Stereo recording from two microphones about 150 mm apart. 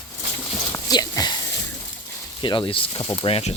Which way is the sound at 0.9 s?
25° left (ahead or behind).